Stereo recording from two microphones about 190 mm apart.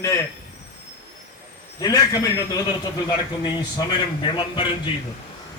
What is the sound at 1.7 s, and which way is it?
Speech, 20° left (ahead or behind).